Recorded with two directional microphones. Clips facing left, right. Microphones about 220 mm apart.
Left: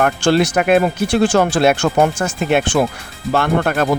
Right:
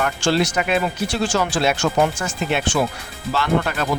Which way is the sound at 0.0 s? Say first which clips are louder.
Left 5 dB; 55° left (ahead or behind).